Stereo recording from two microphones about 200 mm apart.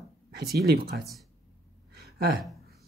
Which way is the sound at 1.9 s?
50° right (ahead or behind).